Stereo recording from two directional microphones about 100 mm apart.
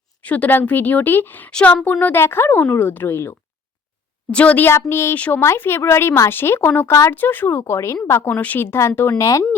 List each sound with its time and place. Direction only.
0.2 s a woman's voice: 15° left (ahead or behind)
4.3 s a woman's voice: 15° left (ahead or behind)
4.7 s a woman's voice: 25° left (ahead or behind)